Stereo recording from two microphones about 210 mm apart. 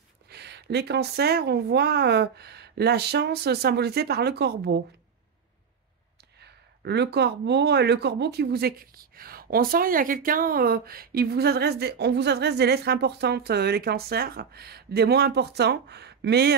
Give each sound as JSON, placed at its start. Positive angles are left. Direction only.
{"t": 0.3, "sound": "speech", "side_deg": -50}
{"t": 6.4, "sound": "speech", "side_deg": -50}